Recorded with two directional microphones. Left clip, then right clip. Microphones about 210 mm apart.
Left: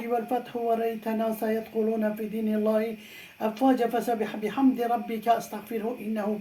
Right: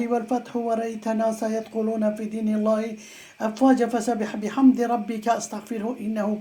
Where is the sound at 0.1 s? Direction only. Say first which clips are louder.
Left 2 dB; 30° right (ahead or behind).